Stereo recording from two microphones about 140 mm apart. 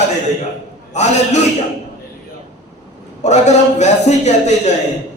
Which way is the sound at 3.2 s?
55° left (ahead or behind).